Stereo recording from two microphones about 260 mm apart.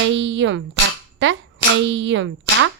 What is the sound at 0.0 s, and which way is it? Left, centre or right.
Speech, right.